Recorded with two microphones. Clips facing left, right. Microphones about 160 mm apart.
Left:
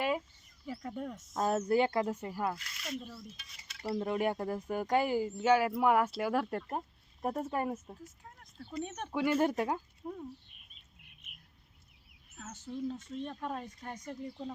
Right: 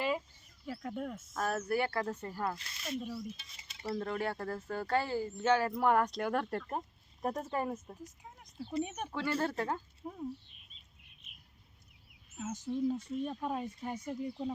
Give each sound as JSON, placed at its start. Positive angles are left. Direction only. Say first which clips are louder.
{"t": 0.7, "sound": "speech", "louder": "even", "side_deg": 0}
{"t": 1.3, "sound": "speech", "louder": "left 5 dB", "side_deg": 20}
{"t": 2.6, "sound": "speech", "louder": "right 1 dB", "side_deg": -25}
{"t": 3.0, "sound": "speech", "louder": "right 7 dB", "side_deg": -5}
{"t": 3.3, "sound": "cutlery", "louder": "left 1 dB", "side_deg": -25}
{"t": 3.8, "sound": "speech", "louder": "left 3 dB", "side_deg": 15}
{"t": 8.2, "sound": "a sound", "louder": "right 4 dB", "side_deg": -15}
{"t": 8.8, "sound": "speech", "louder": "right 1 dB", "side_deg": -10}
{"t": 9.1, "sound": "speech", "louder": "left 5 dB", "side_deg": 15}
{"t": 10.1, "sound": "speech", "louder": "right 1 dB", "side_deg": -5}
{"t": 12.4, "sound": "speech", "louder": "right 5 dB", "side_deg": -15}